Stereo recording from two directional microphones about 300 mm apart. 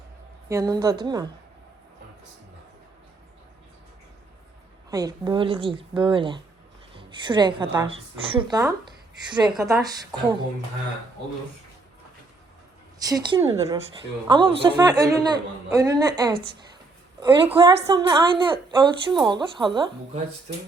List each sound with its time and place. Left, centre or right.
0.4 s a woman's voice: centre
4.9 s a woman's voice: centre
9.6 s a woman's voice: centre
9.8 s a woman's voice: centre
13.1 s a woman's voice: centre